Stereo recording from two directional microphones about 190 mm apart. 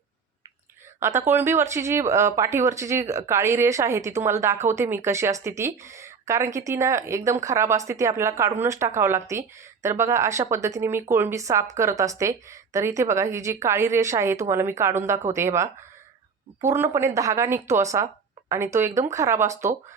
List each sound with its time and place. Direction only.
0.9 s speech: 15° right (ahead or behind)